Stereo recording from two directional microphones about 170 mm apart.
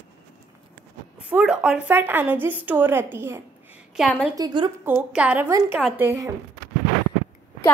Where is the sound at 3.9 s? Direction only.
Centre (ahead or behind).